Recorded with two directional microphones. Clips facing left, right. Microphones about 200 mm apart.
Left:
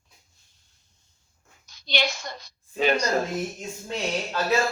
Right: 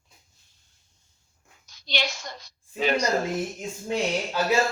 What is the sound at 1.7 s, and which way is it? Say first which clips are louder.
A woman's voice: left 3 dB; 60° left (ahead or behind).